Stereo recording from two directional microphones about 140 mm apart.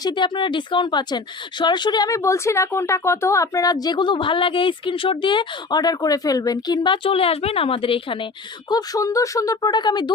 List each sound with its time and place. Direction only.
0.0 s speech: 35° left (ahead or behind)
8.7 s speech: 25° left (ahead or behind)